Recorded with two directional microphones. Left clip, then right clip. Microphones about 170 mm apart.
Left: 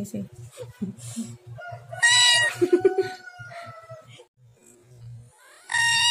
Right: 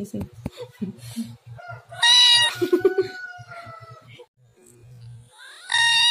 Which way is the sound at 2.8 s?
10° left (ahead or behind).